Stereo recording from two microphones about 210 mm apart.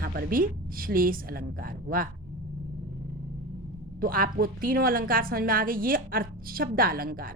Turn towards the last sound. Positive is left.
turn(degrees=-45)  # may be behind; listen again after turning